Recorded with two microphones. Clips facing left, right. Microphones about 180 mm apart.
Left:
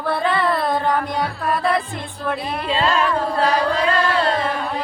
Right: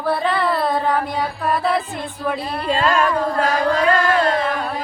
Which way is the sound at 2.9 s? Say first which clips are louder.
Right 2 dB; 45° right (ahead or behind).